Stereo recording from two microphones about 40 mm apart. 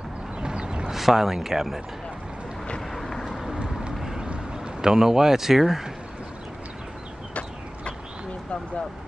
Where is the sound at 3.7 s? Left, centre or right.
Centre.